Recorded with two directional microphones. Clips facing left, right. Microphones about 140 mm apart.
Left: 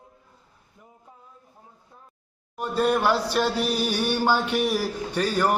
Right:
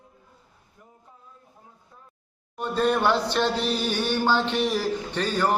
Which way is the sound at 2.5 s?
10° left (ahead or behind).